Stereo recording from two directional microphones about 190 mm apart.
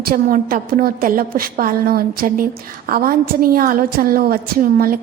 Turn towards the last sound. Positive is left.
turn(degrees=-50)  # may be behind; listen again after turning